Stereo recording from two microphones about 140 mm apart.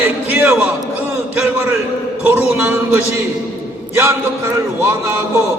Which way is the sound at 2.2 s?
15° right (ahead or behind).